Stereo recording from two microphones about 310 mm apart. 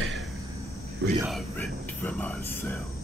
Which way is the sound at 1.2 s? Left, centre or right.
Centre.